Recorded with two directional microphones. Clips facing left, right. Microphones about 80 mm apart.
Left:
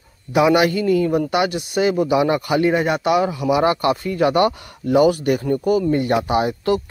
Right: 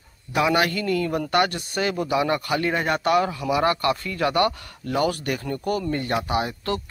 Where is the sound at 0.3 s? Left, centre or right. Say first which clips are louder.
Left 6 dB; centre.